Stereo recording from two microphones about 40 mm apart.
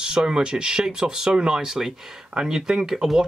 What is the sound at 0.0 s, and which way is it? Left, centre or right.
Speech, centre.